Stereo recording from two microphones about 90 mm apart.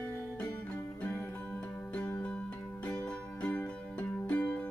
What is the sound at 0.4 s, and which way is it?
Music, 15° left (ahead or behind).